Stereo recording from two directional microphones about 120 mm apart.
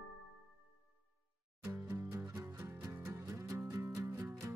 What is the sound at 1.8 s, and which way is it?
Music, 20° right (ahead or behind).